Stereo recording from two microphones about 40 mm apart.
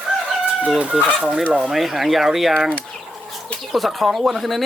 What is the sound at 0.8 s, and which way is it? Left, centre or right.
Chicken, right.